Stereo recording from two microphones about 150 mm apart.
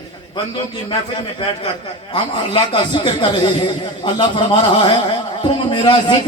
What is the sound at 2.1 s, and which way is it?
Speech, 35° left (ahead or behind).